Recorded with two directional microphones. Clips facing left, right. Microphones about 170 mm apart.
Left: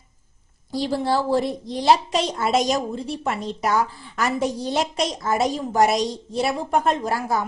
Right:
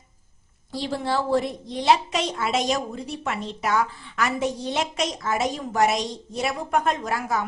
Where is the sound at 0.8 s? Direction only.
35° left (ahead or behind).